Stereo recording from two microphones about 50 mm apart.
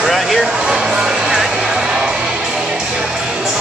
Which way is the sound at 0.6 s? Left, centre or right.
Centre.